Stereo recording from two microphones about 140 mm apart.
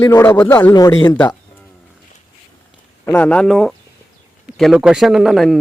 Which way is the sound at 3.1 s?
10° left (ahead or behind).